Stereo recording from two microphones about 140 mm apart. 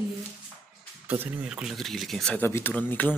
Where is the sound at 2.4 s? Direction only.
15° left (ahead or behind).